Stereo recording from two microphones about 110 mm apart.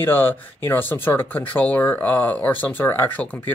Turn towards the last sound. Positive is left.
turn(degrees=15)  # may be behind; listen again after turning